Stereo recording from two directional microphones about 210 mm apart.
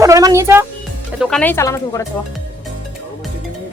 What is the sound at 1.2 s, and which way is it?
Speech, centre (ahead or behind).